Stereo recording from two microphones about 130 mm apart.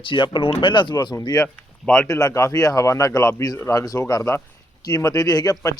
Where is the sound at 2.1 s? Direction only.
25° left (ahead or behind).